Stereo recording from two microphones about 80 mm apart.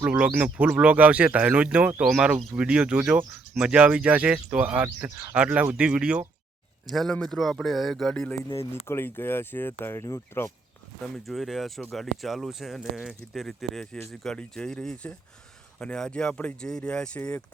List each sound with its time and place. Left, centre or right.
0.0 s speech: centre
6.8 s speech: centre
8.7 s speech: left
11.0 s speech: centre